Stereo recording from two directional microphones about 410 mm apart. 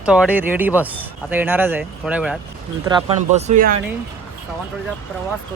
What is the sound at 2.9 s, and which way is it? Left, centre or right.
Speech, centre.